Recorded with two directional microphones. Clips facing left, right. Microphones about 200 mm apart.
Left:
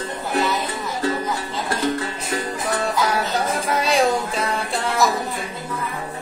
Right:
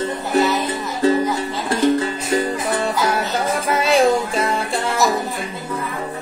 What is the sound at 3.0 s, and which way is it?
Music, centre (ahead or behind).